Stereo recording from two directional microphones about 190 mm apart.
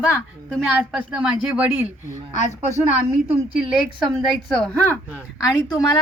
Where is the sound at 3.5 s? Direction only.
5° right (ahead or behind).